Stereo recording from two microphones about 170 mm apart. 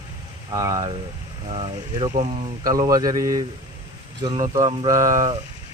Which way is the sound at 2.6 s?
20° right (ahead or behind).